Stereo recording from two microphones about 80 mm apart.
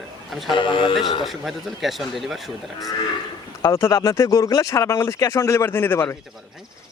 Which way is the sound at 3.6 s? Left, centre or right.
Left.